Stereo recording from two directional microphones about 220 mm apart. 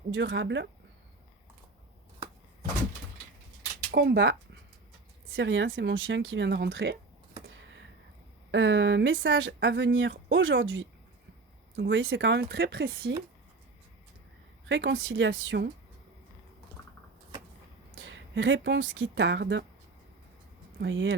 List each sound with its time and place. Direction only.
0.1 s speech: 55° right (ahead or behind)
3.9 s speech: 50° right (ahead or behind)
8.4 s speech: 55° right (ahead or behind)
14.7 s speech: 55° right (ahead or behind)
17.9 s speech: 60° right (ahead or behind)
20.7 s speech: 55° right (ahead or behind)